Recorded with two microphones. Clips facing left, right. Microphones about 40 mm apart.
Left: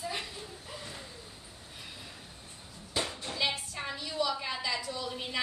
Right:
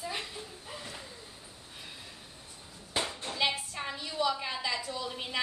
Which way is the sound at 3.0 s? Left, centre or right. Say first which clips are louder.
Right 1 dB; right.